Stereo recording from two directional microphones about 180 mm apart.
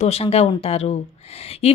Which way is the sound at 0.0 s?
35° left (ahead or behind).